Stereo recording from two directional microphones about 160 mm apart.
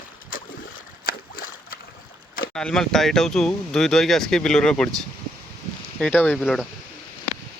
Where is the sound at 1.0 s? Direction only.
65° left (ahead or behind).